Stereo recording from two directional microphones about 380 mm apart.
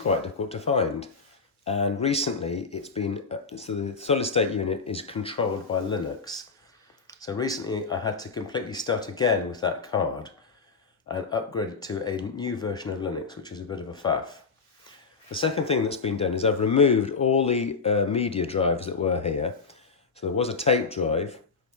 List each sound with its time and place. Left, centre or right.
0.1 s speech: centre